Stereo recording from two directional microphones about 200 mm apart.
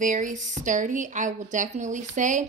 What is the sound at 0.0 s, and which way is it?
A woman's voice, 40° right (ahead or behind).